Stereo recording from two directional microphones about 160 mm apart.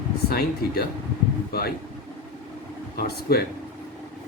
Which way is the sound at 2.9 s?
75° left (ahead or behind).